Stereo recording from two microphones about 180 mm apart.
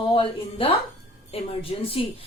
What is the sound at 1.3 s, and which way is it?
Speech, 35° left (ahead or behind).